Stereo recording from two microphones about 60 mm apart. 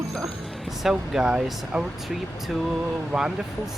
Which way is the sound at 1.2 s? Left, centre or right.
Centre.